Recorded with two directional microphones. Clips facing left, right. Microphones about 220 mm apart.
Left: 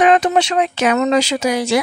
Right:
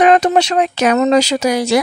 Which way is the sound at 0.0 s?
40° right (ahead or behind).